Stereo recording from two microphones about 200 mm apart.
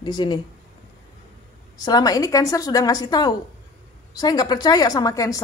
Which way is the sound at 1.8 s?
20° left (ahead or behind).